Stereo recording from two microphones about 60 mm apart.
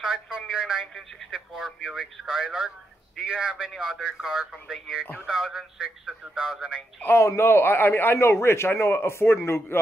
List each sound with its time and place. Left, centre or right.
0.0 s a sound: centre
0.5 s speech: centre
7.2 s a man's voice: left